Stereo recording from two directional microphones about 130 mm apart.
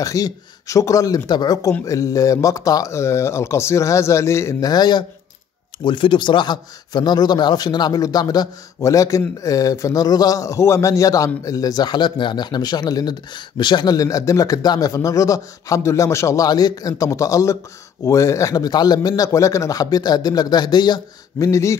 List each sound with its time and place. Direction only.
0.0 s a man's voice: 25° left (ahead or behind)